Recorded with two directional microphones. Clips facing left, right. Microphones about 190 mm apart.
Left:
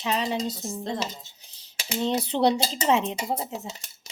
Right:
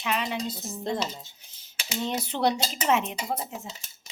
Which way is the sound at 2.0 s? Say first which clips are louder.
Left 4 dB; 25° left (ahead or behind).